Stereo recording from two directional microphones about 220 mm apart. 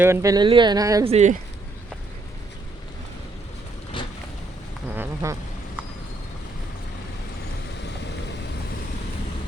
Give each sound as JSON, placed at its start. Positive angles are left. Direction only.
{"t": 0.0, "sound": "speech", "side_deg": -15}
{"t": 1.1, "sound": "speech", "side_deg": -35}
{"t": 4.0, "sound": "vehicle", "side_deg": 20}
{"t": 4.9, "sound": "duck", "side_deg": -10}